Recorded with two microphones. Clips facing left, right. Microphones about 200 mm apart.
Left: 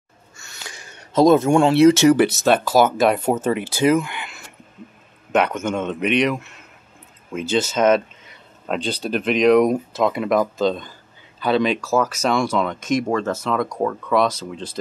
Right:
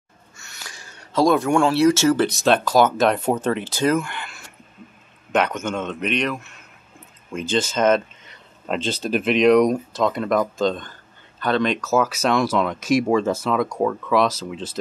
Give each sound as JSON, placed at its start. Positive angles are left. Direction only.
{"t": 0.7, "sound": "speech", "side_deg": 20}
{"t": 2.2, "sound": "speech", "side_deg": 5}
{"t": 7.3, "sound": "speech", "side_deg": 5}